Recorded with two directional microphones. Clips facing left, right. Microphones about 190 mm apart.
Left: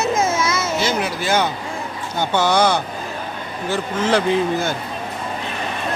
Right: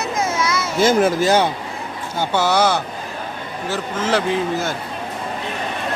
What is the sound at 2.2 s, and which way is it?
A man's voice, 5° right (ahead or behind).